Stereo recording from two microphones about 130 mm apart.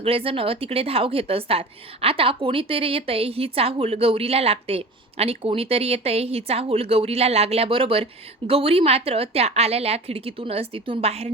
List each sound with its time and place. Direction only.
0.0 s a woman's voice: 45° right (ahead or behind)